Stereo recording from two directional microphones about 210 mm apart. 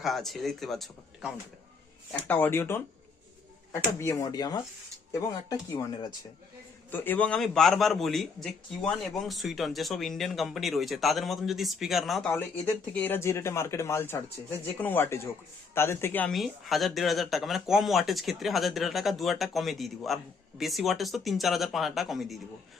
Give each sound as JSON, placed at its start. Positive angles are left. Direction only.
{"t": 0.0, "sound": "a man's voice", "side_deg": 0}
{"t": 6.9, "sound": "a man's voice", "side_deg": 10}